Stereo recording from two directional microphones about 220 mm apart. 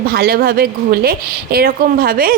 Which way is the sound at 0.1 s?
45° right (ahead or behind).